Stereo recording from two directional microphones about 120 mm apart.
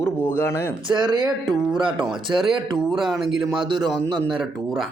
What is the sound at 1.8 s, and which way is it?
Speech, 5° right (ahead or behind).